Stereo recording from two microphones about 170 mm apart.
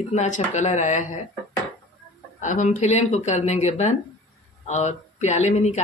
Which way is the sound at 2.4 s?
45° left (ahead or behind).